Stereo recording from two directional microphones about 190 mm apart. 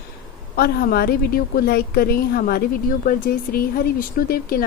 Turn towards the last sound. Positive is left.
turn(degrees=50)  # may be behind; listen again after turning